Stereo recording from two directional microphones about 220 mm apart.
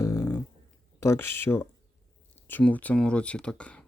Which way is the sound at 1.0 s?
10° left (ahead or behind).